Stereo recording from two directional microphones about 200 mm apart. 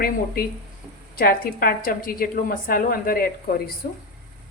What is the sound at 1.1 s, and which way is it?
A woman's voice, 50° left (ahead or behind).